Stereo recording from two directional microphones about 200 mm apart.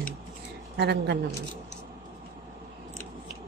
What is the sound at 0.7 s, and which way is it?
Speech, 55° right (ahead or behind).